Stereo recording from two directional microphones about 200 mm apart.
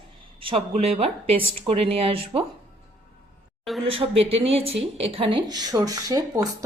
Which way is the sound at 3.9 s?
30° right (ahead or behind).